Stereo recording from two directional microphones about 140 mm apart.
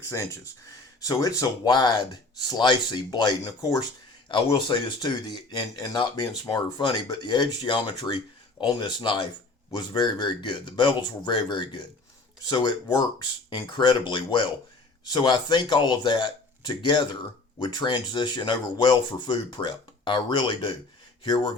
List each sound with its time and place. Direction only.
0.0 s speech: 20° left (ahead or behind)
4.3 s speech: 35° left (ahead or behind)